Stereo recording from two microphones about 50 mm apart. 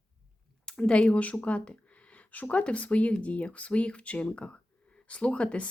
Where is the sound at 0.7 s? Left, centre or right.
Centre.